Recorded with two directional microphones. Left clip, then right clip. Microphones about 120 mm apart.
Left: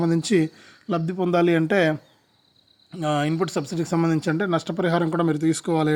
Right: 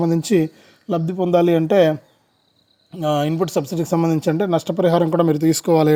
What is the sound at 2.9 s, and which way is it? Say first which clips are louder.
Speech: right 4 dB; 30° right (ahead or behind).